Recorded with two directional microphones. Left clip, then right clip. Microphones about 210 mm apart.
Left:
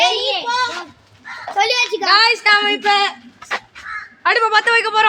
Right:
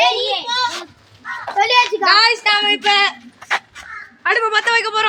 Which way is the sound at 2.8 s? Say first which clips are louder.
Right 2 dB; 15° right (ahead or behind).